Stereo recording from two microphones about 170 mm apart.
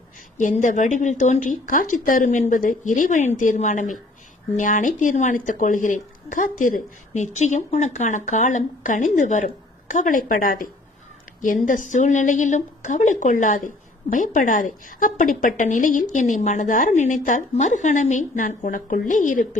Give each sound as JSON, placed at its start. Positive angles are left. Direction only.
{"t": 0.3, "sound": "a woman's voice", "side_deg": 45}